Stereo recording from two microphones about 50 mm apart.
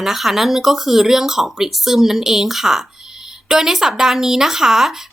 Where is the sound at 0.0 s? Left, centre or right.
Centre.